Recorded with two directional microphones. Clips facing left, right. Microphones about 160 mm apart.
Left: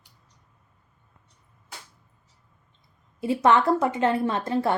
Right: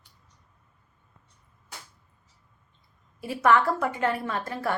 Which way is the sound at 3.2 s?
25° left (ahead or behind).